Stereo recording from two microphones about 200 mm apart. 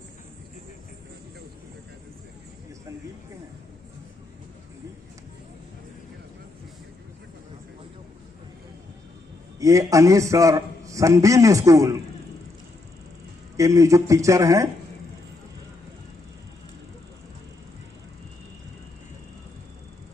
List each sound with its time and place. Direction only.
9.6 s a man's voice: 15° right (ahead or behind)
13.6 s a man's voice: 15° right (ahead or behind)